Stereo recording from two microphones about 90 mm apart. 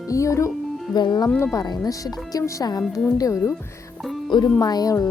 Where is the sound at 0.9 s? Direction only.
50° left (ahead or behind).